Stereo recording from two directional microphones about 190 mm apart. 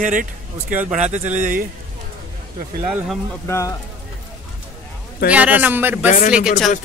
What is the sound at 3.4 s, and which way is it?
Speech, 15° left (ahead or behind).